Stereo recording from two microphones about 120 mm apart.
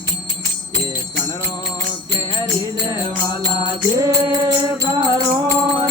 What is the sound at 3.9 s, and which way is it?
Mantra, 35° right (ahead or behind).